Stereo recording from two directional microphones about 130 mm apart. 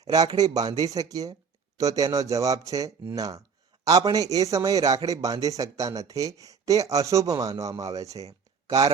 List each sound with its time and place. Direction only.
0.0 s a man's voice: 30° right (ahead or behind)